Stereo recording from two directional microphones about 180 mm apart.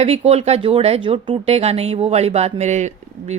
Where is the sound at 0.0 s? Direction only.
35° right (ahead or behind).